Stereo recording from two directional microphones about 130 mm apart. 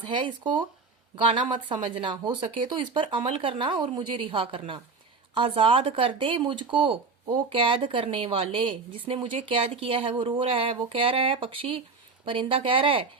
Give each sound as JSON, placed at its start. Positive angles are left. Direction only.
{"t": 1.1, "sound": "a woman's voice", "side_deg": -40}